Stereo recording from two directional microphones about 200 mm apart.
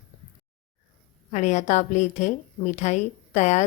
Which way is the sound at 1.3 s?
35° left (ahead or behind).